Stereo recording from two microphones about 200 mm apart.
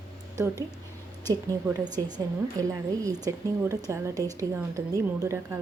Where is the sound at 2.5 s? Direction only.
15° right (ahead or behind).